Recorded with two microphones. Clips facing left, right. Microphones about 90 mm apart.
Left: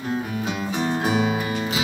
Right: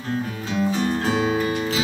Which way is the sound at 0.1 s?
20° left (ahead or behind).